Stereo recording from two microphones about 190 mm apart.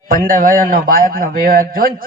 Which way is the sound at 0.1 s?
45° right (ahead or behind).